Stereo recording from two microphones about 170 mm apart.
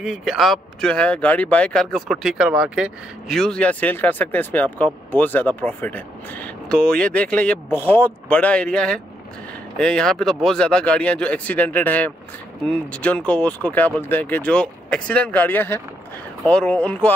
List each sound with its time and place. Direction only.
0.0 s a man's voice: centre (ahead or behind)